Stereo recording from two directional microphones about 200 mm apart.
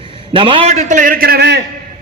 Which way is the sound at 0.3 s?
25° right (ahead or behind).